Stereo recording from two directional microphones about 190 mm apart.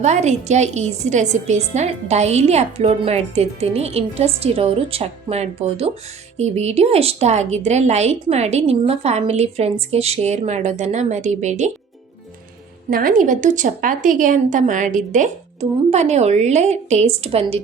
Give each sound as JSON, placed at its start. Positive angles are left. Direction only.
{"t": 0.0, "sound": "a woman's voice", "side_deg": -35}
{"t": 12.9, "sound": "a woman's voice", "side_deg": -50}